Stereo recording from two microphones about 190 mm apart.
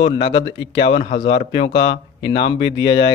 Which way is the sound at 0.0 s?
30° left (ahead or behind).